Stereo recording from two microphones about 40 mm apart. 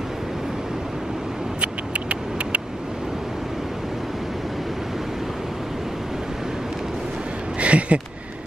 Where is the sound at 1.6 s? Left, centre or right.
Right.